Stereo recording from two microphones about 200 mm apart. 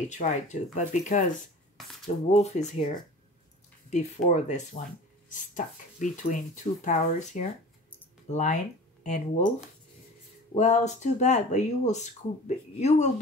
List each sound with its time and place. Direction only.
0.2 s speech: 35° left (ahead or behind)
3.9 s speech: 35° left (ahead or behind)
10.5 s speech: 35° left (ahead or behind)